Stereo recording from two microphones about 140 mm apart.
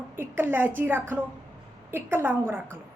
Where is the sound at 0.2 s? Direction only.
15° right (ahead or behind).